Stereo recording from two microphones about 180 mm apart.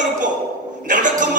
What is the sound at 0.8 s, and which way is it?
Speech, 45° right (ahead or behind).